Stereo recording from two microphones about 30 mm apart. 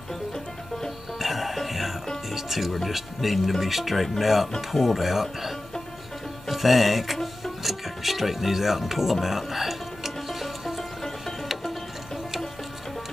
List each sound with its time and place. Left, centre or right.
1.2 s music: centre
2.3 s speech: centre
6.5 s speech: centre
7.6 s music: centre